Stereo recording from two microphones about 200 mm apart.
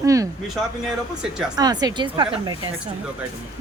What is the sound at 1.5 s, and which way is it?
A woman's voice, 20° right (ahead or behind).